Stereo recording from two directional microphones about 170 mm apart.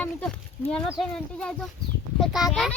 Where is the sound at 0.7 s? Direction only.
5° left (ahead or behind).